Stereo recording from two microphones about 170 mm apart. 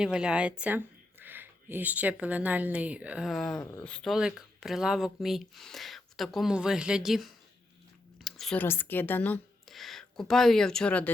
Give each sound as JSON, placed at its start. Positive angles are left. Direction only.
{"t": 0.0, "sound": "speech", "side_deg": -5}
{"t": 3.6, "sound": "speech", "side_deg": 20}
{"t": 3.8, "sound": "speech", "side_deg": 5}
{"t": 8.2, "sound": "a sound", "side_deg": 0}
{"t": 8.6, "sound": "speech", "side_deg": 15}